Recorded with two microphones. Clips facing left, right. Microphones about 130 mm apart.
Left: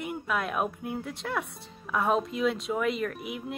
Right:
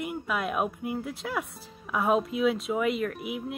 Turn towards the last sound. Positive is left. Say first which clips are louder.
# right 2 dB
turn(degrees=0)  # may be behind; listen again after turning